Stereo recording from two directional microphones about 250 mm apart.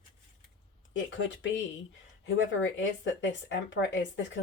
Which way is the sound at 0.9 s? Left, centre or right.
Left.